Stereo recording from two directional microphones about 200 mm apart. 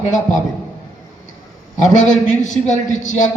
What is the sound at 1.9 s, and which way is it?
A man's voice, 40° left (ahead or behind).